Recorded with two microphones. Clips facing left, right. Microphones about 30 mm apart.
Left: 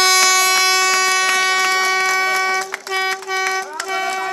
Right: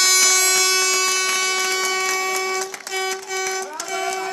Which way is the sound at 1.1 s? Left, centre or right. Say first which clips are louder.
Left 5 dB; left.